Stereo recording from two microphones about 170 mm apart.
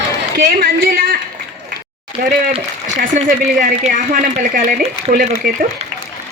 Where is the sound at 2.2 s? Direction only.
55° right (ahead or behind).